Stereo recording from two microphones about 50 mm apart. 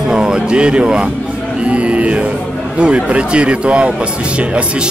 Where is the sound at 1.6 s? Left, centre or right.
Right.